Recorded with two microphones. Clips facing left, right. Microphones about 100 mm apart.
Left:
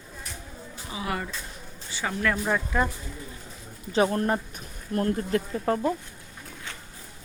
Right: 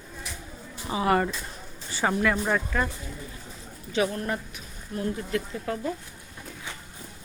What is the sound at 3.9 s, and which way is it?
Speech, 40° left (ahead or behind).